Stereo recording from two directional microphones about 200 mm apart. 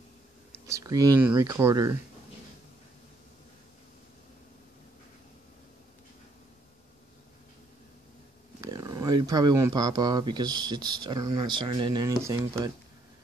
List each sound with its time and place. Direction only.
0.7 s speech: 15° right (ahead or behind)
8.5 s speech: 20° right (ahead or behind)